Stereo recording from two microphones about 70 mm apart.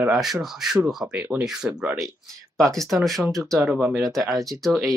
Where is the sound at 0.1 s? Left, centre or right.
Centre.